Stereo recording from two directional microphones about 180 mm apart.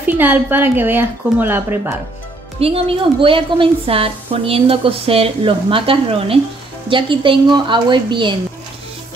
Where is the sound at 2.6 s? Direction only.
30° right (ahead or behind).